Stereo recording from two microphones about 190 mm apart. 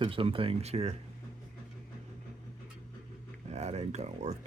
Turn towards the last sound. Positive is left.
turn(degrees=-35)  # may be behind; listen again after turning